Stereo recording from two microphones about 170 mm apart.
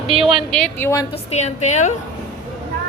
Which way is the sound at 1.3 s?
40° left (ahead or behind).